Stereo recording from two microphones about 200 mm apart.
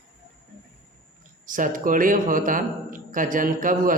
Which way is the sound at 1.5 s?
40° right (ahead or behind).